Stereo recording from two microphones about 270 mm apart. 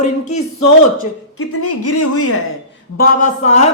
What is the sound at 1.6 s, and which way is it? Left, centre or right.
Speech, left.